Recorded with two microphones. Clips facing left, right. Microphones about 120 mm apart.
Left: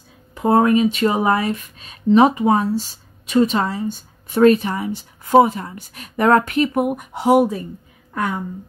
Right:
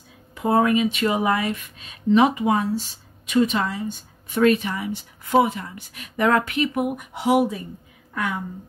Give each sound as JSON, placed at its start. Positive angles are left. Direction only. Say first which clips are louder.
{"t": 0.3, "sound": "speech", "louder": "left 4 dB", "side_deg": 40}